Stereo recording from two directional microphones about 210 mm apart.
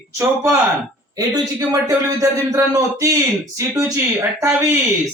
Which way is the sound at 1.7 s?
15° right (ahead or behind).